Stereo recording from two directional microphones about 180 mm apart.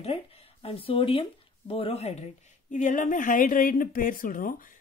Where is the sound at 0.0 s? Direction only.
35° left (ahead or behind).